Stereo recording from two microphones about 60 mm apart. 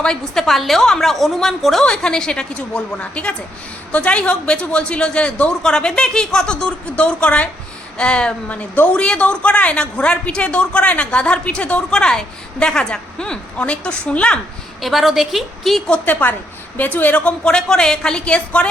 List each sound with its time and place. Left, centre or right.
0.0 s a woman's voice: centre
14.8 s a woman's voice: centre
15.9 s a woman's voice: left